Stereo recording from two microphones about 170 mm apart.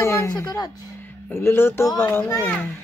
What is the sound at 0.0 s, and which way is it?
Speech, 15° left (ahead or behind).